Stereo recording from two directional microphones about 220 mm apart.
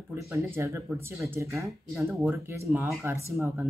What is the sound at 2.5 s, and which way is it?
Speech, 10° right (ahead or behind).